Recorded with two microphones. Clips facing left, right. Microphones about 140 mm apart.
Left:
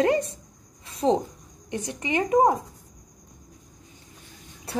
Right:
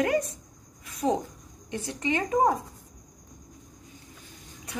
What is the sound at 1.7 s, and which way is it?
Speech, 20° left (ahead or behind).